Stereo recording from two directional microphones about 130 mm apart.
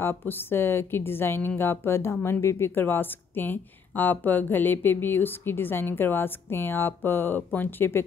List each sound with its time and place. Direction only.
0.0 s a woman's voice: 15° left (ahead or behind)